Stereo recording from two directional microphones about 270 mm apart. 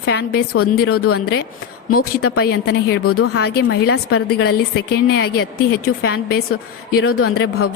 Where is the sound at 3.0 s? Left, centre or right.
Left.